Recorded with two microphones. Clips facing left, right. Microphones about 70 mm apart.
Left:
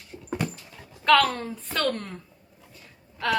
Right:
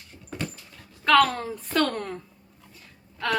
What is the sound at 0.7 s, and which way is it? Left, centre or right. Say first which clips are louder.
Speech: even; centre.